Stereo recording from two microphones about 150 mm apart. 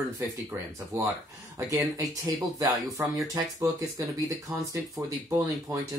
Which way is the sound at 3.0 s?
15° right (ahead or behind).